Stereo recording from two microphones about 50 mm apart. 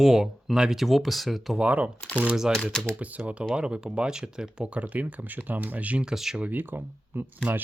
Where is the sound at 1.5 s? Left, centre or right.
Right.